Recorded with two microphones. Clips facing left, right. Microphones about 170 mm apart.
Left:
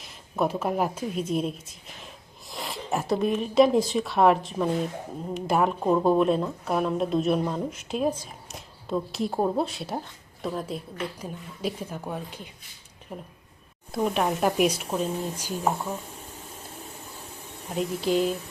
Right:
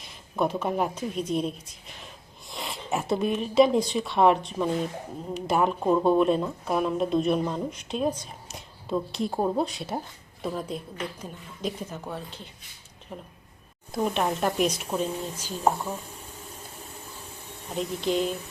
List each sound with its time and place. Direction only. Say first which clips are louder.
0.0 s speech: even; centre (ahead or behind)
17.7 s speech: left 2 dB; 5° left (ahead or behind)